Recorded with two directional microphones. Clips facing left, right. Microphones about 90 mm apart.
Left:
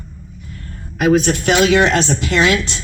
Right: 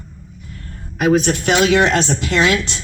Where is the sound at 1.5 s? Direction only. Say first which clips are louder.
Left 1 dB; 25° right (ahead or behind).